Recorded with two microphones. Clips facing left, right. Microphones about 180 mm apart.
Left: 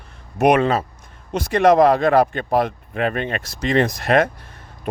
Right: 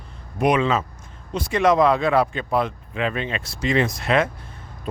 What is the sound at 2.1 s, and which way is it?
Speech, 50° left (ahead or behind).